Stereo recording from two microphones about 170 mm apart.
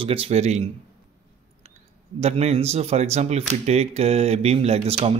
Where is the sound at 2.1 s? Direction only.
40° right (ahead or behind).